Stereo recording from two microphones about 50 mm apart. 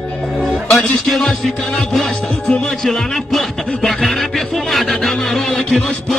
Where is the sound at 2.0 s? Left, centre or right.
Centre.